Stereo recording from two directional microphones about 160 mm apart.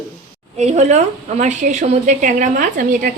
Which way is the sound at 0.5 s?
45° right (ahead or behind).